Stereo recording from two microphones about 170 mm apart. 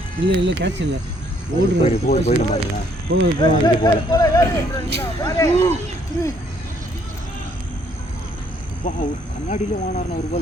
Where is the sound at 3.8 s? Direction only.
20° left (ahead or behind).